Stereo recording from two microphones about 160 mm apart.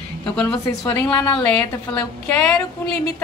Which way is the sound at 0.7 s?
15° left (ahead or behind).